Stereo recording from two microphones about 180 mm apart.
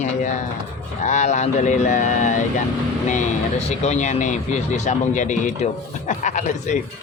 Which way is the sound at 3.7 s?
40° left (ahead or behind).